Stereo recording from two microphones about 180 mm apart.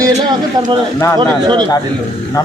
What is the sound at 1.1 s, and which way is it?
Speech, 25° right (ahead or behind).